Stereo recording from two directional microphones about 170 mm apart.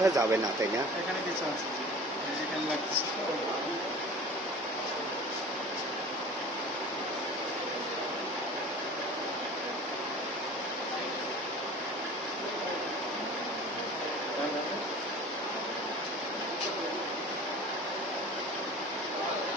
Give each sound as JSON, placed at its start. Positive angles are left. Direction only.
{"t": 0.0, "sound": "speech", "side_deg": -20}